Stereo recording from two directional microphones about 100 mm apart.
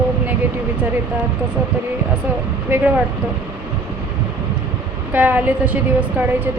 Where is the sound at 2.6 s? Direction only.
20° right (ahead or behind).